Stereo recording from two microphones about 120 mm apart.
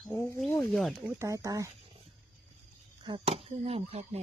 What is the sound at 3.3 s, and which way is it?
Speech, 55° right (ahead or behind).